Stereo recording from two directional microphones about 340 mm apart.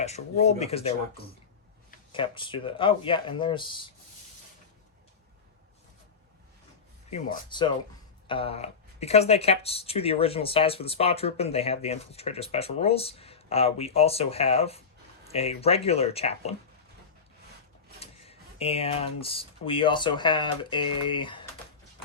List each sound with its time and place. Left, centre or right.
0.0 s speech: centre
7.1 s speech: centre
18.0 s speech: centre